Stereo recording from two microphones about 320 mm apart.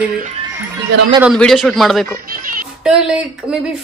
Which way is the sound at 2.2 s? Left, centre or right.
Right.